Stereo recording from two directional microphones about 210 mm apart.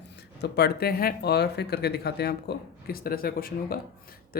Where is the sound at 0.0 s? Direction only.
55° left (ahead or behind).